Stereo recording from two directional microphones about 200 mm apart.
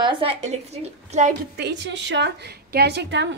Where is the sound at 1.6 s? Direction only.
60° right (ahead or behind).